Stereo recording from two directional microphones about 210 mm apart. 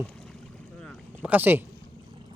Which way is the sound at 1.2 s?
10° right (ahead or behind).